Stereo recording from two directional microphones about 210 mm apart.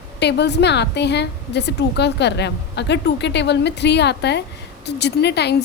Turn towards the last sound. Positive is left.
turn(degrees=55)  # may be behind; listen again after turning